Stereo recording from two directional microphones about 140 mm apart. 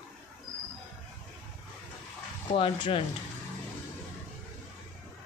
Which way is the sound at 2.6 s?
40° left (ahead or behind).